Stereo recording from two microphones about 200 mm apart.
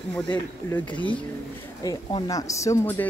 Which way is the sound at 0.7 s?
5° left (ahead or behind).